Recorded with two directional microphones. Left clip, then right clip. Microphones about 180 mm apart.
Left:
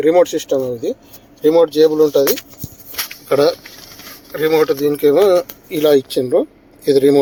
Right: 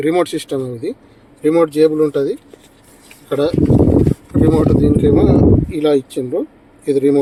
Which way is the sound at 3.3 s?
10° left (ahead or behind).